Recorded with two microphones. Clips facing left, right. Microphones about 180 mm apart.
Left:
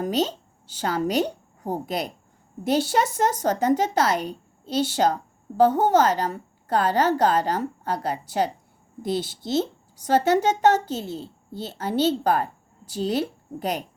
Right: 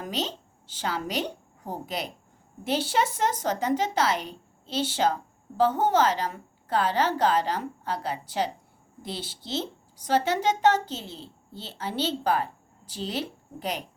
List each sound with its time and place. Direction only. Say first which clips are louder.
0.0 s a woman's voice: left 8 dB; 45° left (ahead or behind)